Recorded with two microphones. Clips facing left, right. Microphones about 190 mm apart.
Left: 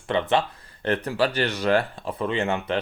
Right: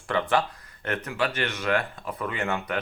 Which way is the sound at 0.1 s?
25° left (ahead or behind).